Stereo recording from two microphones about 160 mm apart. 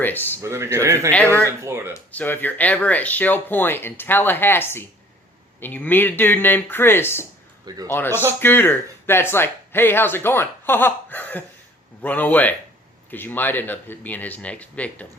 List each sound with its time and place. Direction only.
0.0 s speech: 10° left (ahead or behind)
0.4 s speech: 15° right (ahead or behind)
1.1 s speech: 10° left (ahead or behind)
1.6 s speech: 15° right (ahead or behind)
1.9 s speech: 15° left (ahead or behind)